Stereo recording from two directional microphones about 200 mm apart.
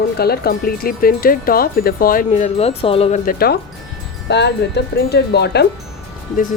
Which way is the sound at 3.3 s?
50° left (ahead or behind).